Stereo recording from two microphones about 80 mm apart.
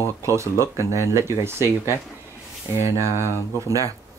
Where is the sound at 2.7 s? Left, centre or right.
Right.